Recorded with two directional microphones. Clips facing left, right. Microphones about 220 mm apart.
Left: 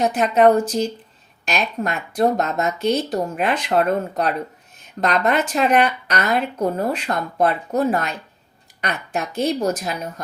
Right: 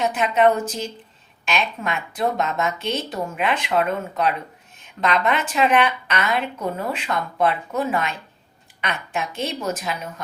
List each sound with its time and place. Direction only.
0.0 s a woman's voice: 40° left (ahead or behind)